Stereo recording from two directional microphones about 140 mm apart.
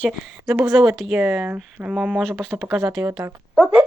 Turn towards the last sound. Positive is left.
turn(degrees=-5)  # may be behind; listen again after turning